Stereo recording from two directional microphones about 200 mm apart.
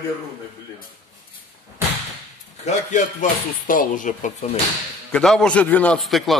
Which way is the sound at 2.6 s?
40° left (ahead or behind).